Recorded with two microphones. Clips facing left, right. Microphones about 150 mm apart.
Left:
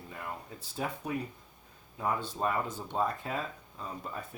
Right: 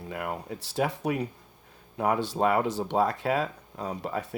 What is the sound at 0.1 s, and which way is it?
Speech, 75° right (ahead or behind).